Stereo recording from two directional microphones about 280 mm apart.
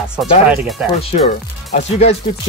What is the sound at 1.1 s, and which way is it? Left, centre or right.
Speech, left.